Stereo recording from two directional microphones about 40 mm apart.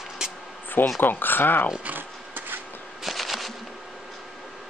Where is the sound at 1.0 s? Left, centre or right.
Left.